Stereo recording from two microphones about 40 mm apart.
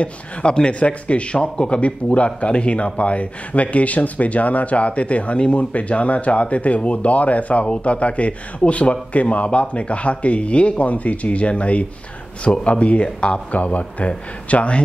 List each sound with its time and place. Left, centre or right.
0.0 s speech: left